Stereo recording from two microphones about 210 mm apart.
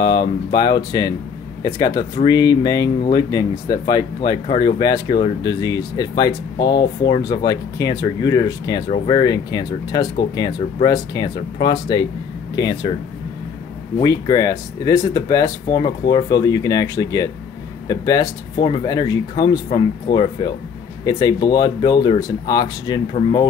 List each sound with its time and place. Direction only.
0.0 s speech: 20° left (ahead or behind)
13.9 s speech: 20° left (ahead or behind)